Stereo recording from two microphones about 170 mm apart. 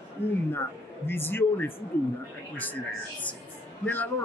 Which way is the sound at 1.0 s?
15° left (ahead or behind).